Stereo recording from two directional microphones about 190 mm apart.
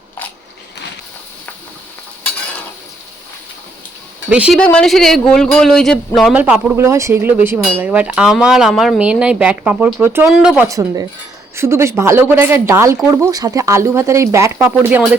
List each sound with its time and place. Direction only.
4.3 s speech: 5° right (ahead or behind)
10.7 s speech: 15° right (ahead or behind)